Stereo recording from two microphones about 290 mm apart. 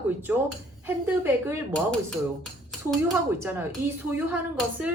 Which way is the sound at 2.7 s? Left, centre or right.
Centre.